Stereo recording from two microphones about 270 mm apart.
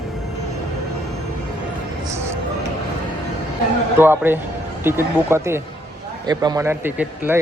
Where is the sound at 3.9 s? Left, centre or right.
Centre.